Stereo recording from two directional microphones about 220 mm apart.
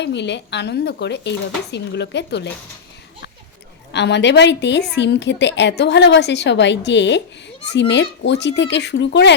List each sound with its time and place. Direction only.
0.0 s a woman's voice: 50° left (ahead or behind)
3.9 s a woman's voice: 50° left (ahead or behind)